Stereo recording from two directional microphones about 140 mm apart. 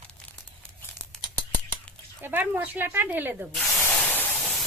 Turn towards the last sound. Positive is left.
turn(degrees=0)  # may be behind; listen again after turning